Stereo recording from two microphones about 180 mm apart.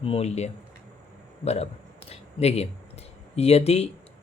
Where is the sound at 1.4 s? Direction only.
35° left (ahead or behind).